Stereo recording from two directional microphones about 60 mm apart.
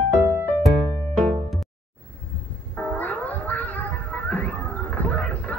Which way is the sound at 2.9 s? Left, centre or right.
Left.